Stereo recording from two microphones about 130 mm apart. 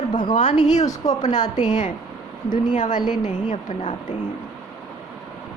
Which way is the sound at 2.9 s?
35° left (ahead or behind).